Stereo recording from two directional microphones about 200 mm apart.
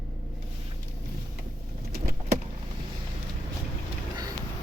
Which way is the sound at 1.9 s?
50° right (ahead or behind).